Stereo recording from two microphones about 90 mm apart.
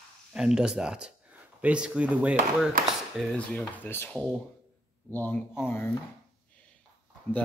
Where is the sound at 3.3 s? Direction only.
15° left (ahead or behind).